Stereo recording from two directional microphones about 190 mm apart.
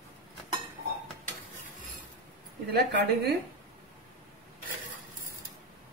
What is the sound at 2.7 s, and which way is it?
Speech, 55° right (ahead or behind).